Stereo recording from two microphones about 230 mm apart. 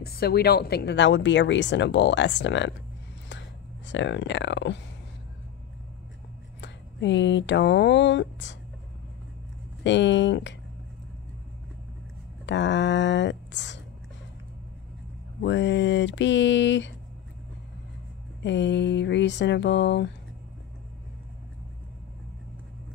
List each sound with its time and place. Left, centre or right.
0.0 s a woman's voice: left
3.3 s a sound: left
6.6 s speech: left
9.8 s a woman's voice: left
12.4 s a woman's voice: left
15.4 s a woman's voice: left
18.4 s a woman's voice: left